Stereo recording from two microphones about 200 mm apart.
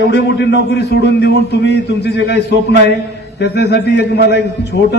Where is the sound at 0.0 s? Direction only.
60° left (ahead or behind).